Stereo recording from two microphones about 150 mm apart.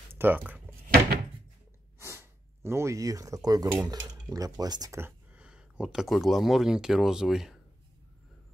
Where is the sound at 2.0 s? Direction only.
15° right (ahead or behind).